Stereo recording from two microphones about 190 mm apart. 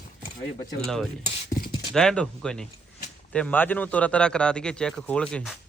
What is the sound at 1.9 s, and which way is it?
Speech, 5° left (ahead or behind).